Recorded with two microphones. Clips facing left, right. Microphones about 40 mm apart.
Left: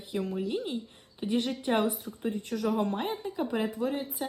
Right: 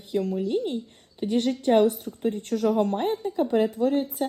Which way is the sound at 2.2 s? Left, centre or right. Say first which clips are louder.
Right 6 dB; right.